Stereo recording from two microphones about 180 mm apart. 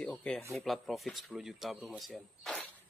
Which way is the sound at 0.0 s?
5° left (ahead or behind).